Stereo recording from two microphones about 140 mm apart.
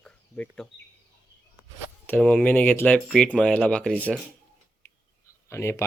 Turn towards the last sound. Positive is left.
turn(degrees=20)  # may be behind; listen again after turning